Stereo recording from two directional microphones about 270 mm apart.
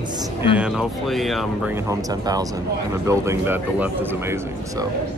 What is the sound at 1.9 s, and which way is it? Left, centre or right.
A man's voice, centre.